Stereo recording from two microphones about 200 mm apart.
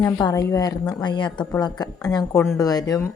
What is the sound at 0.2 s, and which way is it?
Speech, 20° left (ahead or behind).